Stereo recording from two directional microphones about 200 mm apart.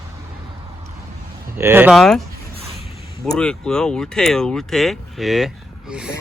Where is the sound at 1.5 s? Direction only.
10° right (ahead or behind).